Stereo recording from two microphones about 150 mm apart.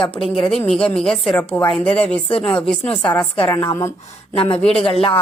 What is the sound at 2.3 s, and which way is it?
Speech, 40° left (ahead or behind).